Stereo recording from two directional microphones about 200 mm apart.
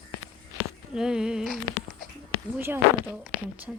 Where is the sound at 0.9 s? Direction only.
5° right (ahead or behind).